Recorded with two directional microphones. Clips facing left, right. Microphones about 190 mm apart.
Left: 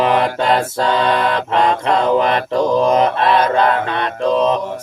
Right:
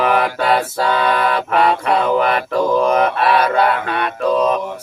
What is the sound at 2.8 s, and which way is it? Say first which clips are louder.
Speech: left 2 dB; 25° left (ahead or behind).